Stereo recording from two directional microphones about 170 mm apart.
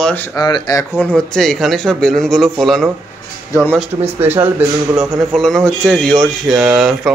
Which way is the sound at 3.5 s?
10° left (ahead or behind).